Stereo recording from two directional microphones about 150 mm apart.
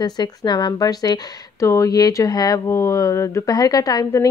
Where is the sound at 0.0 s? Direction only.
30° left (ahead or behind).